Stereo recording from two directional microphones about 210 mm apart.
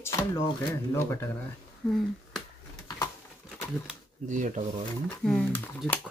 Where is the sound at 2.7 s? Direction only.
15° left (ahead or behind).